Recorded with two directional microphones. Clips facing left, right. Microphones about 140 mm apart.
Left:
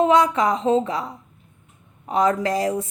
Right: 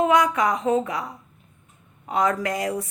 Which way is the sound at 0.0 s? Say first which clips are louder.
Left 2 dB; 25° left (ahead or behind).